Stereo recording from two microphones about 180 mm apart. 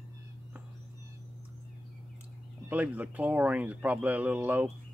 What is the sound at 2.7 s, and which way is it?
Speech, 10° right (ahead or behind).